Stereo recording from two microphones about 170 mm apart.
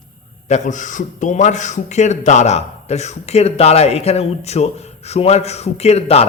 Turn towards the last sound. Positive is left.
turn(degrees=40)  # may be behind; listen again after turning